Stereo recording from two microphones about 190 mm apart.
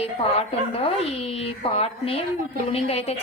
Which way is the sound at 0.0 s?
30° left (ahead or behind).